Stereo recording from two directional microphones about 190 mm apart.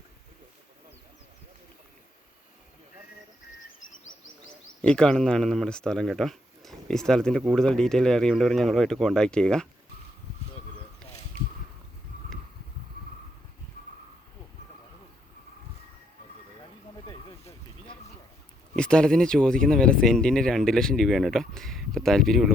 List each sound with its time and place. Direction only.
4.8 s speech: 5° left (ahead or behind)
17.1 s a sound: 20° left (ahead or behind)
18.8 s speech: 5° left (ahead or behind)